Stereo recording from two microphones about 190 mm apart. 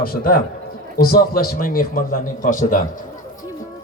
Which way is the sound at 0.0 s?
50° left (ahead or behind).